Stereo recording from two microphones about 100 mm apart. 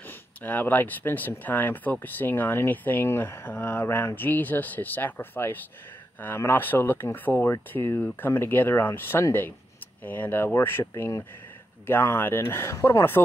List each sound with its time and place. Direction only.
0.4 s speech: 20° left (ahead or behind)